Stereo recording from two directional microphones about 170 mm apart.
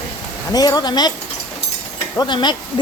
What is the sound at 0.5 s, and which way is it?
Speech, 20° left (ahead or behind).